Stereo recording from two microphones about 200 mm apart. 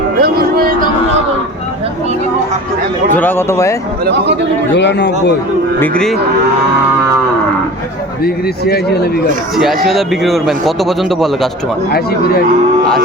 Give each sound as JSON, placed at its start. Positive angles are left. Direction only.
{"t": 0.2, "sound": "a sound", "side_deg": -50}
{"t": 3.2, "sound": "speech", "side_deg": 10}
{"t": 4.0, "sound": "speech", "side_deg": -60}
{"t": 4.7, "sound": "speech", "side_deg": 60}
{"t": 5.8, "sound": "a man's voice", "side_deg": 5}
{"t": 8.2, "sound": "speech", "side_deg": 50}
{"t": 9.6, "sound": "a man's voice", "side_deg": 0}
{"t": 11.9, "sound": "speech", "side_deg": 50}